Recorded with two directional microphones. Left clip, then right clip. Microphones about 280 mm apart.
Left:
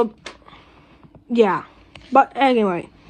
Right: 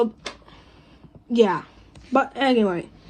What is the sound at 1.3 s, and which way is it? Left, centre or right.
A woman's voice, centre.